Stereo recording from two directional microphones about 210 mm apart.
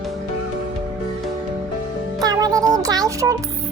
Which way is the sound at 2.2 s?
20° right (ahead or behind).